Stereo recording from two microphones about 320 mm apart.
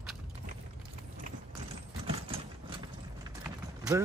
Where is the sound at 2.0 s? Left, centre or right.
Centre.